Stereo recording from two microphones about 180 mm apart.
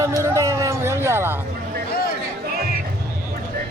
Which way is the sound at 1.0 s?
15° right (ahead or behind).